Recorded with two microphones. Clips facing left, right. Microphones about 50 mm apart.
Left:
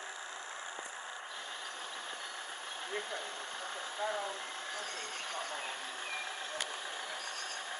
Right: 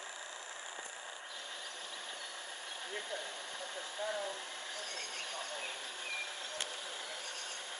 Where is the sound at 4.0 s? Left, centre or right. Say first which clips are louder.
Left 2 dB; left.